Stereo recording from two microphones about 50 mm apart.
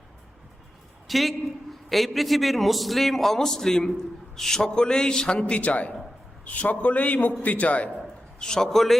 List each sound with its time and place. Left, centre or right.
1.0 s a woman's voice: centre; by 7.9 s left
8.4 s a man's voice: centre